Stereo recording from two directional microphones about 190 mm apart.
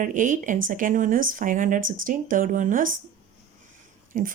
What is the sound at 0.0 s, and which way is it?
A woman's voice, 45° right (ahead or behind).